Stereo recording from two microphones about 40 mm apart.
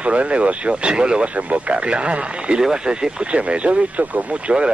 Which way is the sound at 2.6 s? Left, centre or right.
Centre.